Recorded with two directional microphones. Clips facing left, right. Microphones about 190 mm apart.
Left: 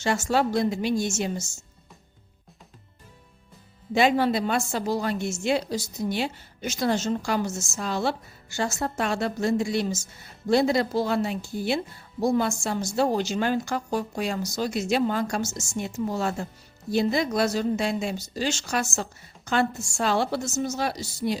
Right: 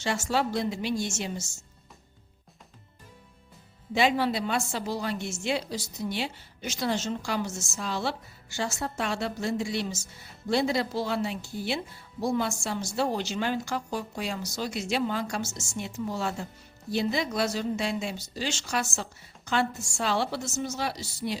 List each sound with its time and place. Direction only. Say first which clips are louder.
0.0 s a woman's voice: left 4 dB; 45° left (ahead or behind)
3.9 s a woman's voice: left 4 dB; 50° left (ahead or behind)